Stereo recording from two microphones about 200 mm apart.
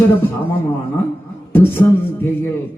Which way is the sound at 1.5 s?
10° left (ahead or behind).